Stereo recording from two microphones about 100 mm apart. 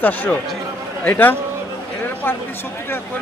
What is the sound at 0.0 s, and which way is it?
A man's voice, 15° left (ahead or behind).